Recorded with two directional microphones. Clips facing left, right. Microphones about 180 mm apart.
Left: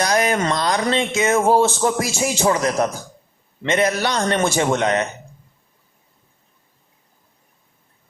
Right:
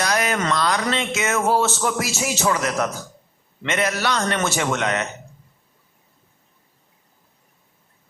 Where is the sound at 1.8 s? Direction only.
30° left (ahead or behind).